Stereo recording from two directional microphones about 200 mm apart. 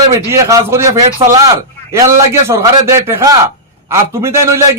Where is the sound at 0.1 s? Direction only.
15° right (ahead or behind).